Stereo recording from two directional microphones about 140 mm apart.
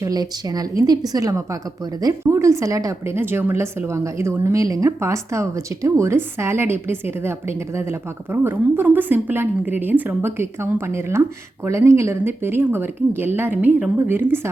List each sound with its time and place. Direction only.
0.0 s a woman's voice: 25° right (ahead or behind)